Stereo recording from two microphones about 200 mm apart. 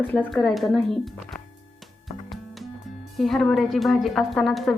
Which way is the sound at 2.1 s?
35° left (ahead or behind).